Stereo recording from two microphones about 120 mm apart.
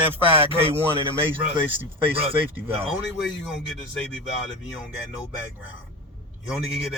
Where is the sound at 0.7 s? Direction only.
45° right (ahead or behind).